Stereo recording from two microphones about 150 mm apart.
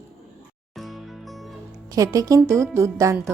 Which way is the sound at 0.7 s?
Centre (ahead or behind).